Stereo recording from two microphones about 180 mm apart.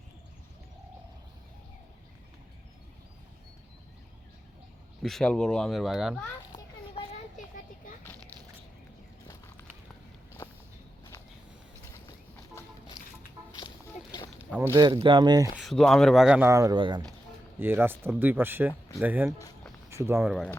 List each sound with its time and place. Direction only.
5.0 s speech: 5° left (ahead or behind)
7.3 s a sound: 45° left (ahead or behind)
9.2 s a sound: 15° left (ahead or behind)
12.6 s a sound: 15° left (ahead or behind)
14.6 s speech: 15° right (ahead or behind)
14.8 s speech: 25° right (ahead or behind)
15.5 s speech: centre (ahead or behind)
16.5 s speech: 20° right (ahead or behind)
17.6 s speech: 10° right (ahead or behind)
20.3 s speech: centre (ahead or behind)